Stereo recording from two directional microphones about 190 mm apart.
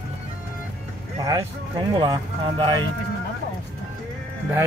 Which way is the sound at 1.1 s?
20° right (ahead or behind).